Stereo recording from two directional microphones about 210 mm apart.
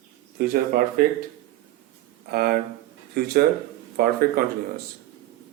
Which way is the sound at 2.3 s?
45° right (ahead or behind).